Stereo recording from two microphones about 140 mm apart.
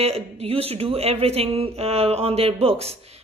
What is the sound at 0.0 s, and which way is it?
Speech, 45° right (ahead or behind).